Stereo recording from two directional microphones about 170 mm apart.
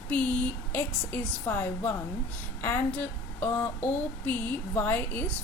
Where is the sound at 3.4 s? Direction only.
15° left (ahead or behind).